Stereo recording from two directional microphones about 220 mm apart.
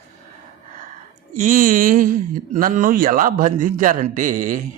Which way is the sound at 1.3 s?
35° right (ahead or behind).